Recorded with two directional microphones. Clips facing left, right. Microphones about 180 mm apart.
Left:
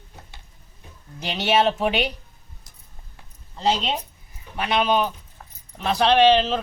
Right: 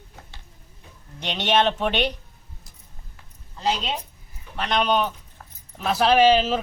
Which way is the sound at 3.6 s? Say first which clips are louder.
Left 3 dB; 25° left (ahead or behind).